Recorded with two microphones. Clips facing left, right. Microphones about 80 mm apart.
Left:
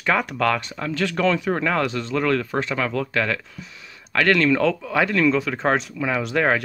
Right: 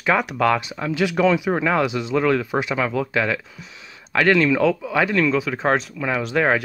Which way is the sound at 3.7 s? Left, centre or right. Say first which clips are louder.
Right 1 dB; centre.